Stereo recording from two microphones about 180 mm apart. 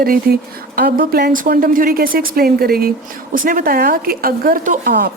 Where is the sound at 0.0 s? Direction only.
55° right (ahead or behind).